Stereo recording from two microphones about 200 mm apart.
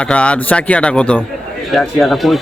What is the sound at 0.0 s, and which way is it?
Speech, 5° left (ahead or behind).